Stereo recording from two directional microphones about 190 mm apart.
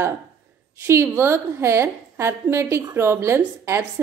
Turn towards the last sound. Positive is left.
turn(degrees=-15)  # may be behind; listen again after turning